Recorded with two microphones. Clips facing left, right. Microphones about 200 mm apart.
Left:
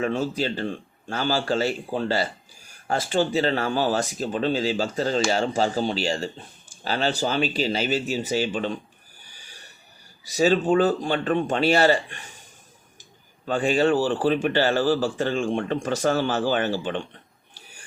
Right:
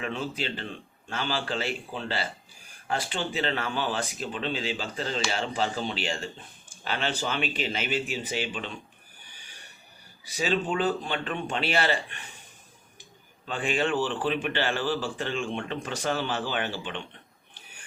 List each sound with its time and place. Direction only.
0.0 s a man's voice: 40° left (ahead or behind)
10.3 s a man's voice: 45° left (ahead or behind)
13.4 s a man's voice: 40° left (ahead or behind)
17.5 s a sound: 40° left (ahead or behind)